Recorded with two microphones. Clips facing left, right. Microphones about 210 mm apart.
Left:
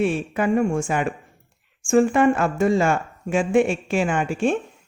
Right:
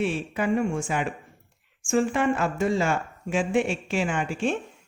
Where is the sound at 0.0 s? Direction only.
50° left (ahead or behind).